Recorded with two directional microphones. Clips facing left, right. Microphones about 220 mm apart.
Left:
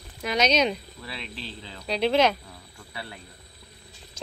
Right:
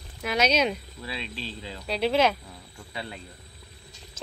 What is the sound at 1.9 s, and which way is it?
Speech, 5° right (ahead or behind).